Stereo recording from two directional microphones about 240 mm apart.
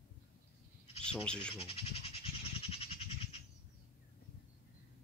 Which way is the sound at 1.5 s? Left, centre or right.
Left.